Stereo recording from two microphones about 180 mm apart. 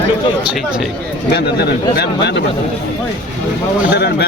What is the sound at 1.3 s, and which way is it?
Speech, 65° left (ahead or behind).